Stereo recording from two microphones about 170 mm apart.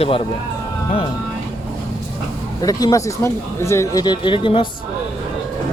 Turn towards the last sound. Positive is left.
turn(degrees=30)  # may be behind; listen again after turning